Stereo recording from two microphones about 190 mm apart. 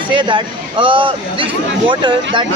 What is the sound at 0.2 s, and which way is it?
A man's voice, 25° right (ahead or behind).